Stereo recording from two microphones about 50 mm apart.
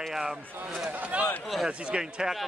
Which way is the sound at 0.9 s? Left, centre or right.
Right.